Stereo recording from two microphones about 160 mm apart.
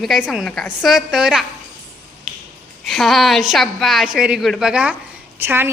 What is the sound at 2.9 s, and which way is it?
A woman's voice, centre (ahead or behind).